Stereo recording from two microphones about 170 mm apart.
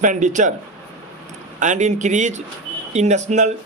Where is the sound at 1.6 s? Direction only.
45° right (ahead or behind).